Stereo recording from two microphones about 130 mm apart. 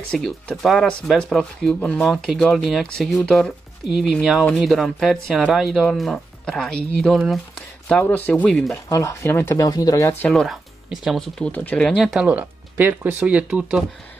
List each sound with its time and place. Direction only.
0.1 s speech: 5° left (ahead or behind)
8.8 s speech: 25° left (ahead or behind)
10.2 s speech: 5° left (ahead or behind)
12.3 s speech: 15° right (ahead or behind)